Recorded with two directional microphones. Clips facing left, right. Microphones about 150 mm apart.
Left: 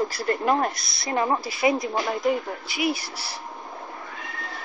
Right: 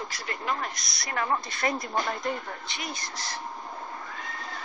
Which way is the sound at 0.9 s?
25° left (ahead or behind).